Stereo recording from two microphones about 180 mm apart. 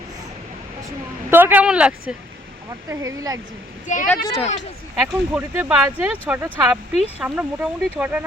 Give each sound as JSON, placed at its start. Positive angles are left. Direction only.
{"t": 1.3, "sound": "speech", "side_deg": -10}
{"t": 2.9, "sound": "speech", "side_deg": -15}
{"t": 3.9, "sound": "speech", "side_deg": 40}
{"t": 4.9, "sound": "speech", "side_deg": -5}